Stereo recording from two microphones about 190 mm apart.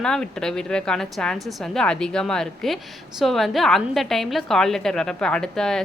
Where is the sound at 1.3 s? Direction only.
20° right (ahead or behind).